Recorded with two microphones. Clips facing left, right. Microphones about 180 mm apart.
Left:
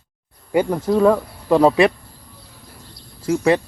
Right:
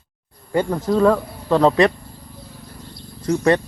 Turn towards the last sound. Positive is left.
turn(degrees=5)  # may be behind; listen again after turning